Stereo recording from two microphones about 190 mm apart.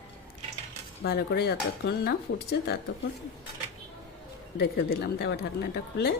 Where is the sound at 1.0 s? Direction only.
60° left (ahead or behind).